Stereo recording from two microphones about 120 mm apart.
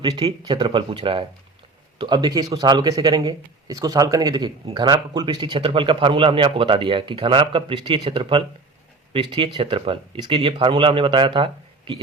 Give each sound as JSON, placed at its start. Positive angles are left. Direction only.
{"t": 0.3, "sound": "a man's voice", "side_deg": -40}
{"t": 2.0, "sound": "a man's voice", "side_deg": -35}